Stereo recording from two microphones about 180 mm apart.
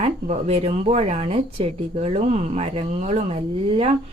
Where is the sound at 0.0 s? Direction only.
35° right (ahead or behind).